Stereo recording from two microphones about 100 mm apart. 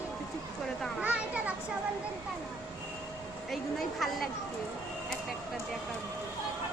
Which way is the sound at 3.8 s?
Centre (ahead or behind).